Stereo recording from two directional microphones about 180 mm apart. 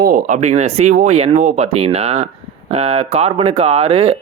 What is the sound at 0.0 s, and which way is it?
Speech, 45° right (ahead or behind).